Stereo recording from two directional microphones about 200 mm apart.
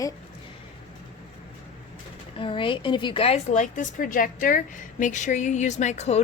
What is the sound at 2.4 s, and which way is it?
A woman's voice, 25° left (ahead or behind).